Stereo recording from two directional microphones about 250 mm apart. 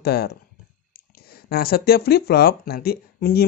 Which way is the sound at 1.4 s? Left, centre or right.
Left.